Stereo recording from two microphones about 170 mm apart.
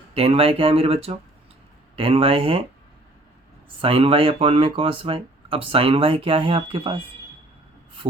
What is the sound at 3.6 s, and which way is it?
Speech, 30° right (ahead or behind).